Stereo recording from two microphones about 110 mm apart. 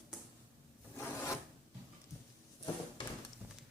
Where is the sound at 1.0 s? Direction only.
25° left (ahead or behind).